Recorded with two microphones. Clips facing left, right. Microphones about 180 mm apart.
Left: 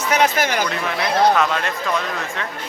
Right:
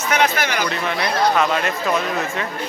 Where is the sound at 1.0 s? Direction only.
Centre (ahead or behind).